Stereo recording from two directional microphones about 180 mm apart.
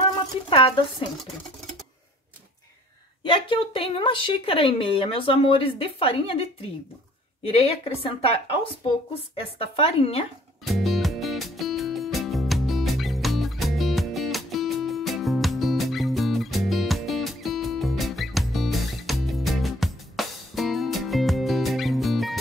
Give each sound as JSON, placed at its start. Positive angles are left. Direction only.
{"t": 0.5, "sound": "a woman's voice", "side_deg": 30}
{"t": 3.3, "sound": "a woman's voice", "side_deg": 30}
{"t": 7.4, "sound": "a woman's voice", "side_deg": 30}
{"t": 10.6, "sound": "music", "side_deg": 0}